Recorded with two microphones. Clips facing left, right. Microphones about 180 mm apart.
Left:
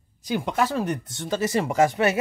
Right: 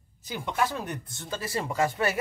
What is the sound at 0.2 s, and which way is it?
Speech, 80° left.